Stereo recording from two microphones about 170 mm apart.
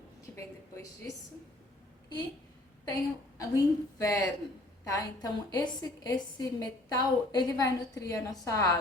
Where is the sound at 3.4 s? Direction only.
20° left (ahead or behind).